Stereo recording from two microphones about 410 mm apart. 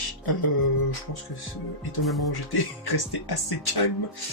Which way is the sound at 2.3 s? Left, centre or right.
Left.